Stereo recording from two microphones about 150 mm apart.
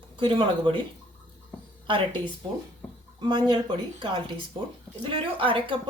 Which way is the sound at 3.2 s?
30° right (ahead or behind).